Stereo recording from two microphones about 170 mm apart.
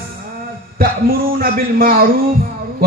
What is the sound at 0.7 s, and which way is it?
A man's voice, 60° right (ahead or behind).